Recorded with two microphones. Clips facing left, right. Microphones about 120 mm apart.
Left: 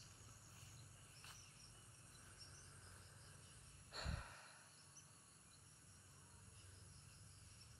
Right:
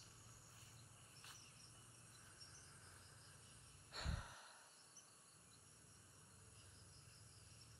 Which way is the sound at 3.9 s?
Centre (ahead or behind).